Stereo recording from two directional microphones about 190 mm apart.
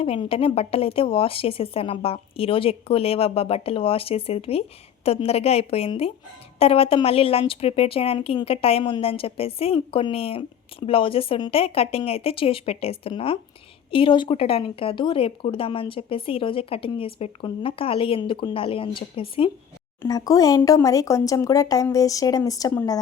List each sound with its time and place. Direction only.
0.0 s a woman's voice: 30° left (ahead or behind)